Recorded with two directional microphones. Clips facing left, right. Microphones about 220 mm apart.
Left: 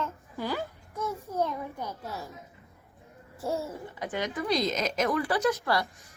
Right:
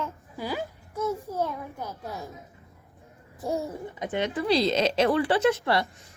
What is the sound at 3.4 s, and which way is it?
Speech, 15° right (ahead or behind).